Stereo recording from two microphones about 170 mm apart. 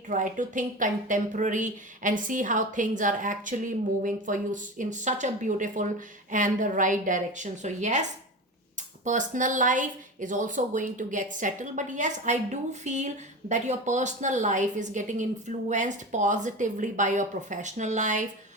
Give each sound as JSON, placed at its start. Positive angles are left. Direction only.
{"t": 0.1, "sound": "a woman's voice", "side_deg": -50}
{"t": 9.0, "sound": "a woman's voice", "side_deg": -45}